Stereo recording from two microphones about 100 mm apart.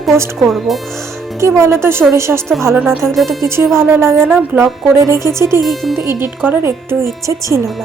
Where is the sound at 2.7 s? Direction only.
15° right (ahead or behind); by 5.3 s 30° right (ahead or behind).